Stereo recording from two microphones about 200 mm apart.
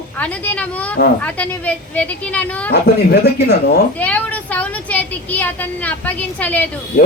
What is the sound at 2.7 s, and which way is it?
Speech, 55° left (ahead or behind).